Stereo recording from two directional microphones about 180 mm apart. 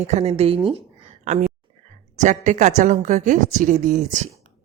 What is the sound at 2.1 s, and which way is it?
A woman's voice, 40° right (ahead or behind).